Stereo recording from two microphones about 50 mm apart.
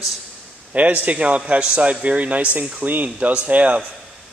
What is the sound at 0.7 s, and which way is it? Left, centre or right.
A man's voice, right.